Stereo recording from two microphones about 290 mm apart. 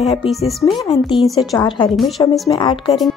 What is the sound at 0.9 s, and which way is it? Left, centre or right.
A woman's voice, centre.